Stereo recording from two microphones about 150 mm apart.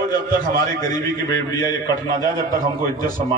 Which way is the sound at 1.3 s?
25° left (ahead or behind).